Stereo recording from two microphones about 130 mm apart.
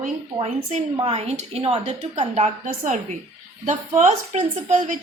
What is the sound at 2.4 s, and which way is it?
A woman's voice, 70° right (ahead or behind).